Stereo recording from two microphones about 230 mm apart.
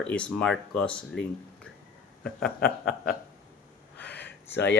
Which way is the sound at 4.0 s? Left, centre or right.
Left.